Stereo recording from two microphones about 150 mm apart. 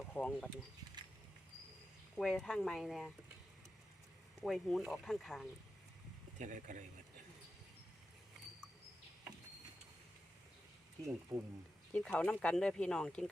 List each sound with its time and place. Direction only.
0.1 s speech: 10° left (ahead or behind)
2.1 s speech: centre (ahead or behind)
4.4 s speech: centre (ahead or behind)
6.4 s speech: 55° right (ahead or behind)
11.0 s speech: 20° right (ahead or behind)
11.9 s speech: 10° left (ahead or behind)